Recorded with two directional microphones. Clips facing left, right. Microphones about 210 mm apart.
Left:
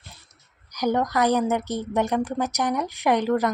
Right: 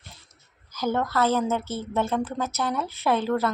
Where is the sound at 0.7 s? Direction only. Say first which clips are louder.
Left 3 dB; 15° left (ahead or behind).